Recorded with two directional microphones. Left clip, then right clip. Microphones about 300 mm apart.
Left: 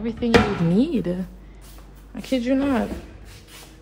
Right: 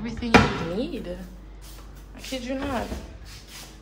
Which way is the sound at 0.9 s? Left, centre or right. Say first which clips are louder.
Left 8 dB; centre.